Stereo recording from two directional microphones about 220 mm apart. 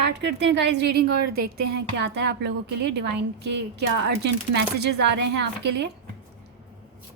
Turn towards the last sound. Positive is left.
turn(degrees=-50)  # may be behind; listen again after turning